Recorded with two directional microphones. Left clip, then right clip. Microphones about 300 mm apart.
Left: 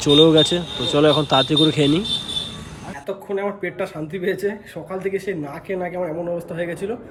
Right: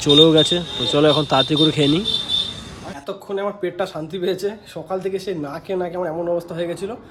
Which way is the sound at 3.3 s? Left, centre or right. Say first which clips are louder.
Right 1 dB; centre.